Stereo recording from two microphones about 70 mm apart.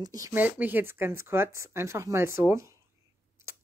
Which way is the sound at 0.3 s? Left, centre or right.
Right.